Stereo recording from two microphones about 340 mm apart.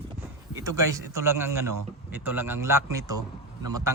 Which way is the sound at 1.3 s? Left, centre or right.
Right.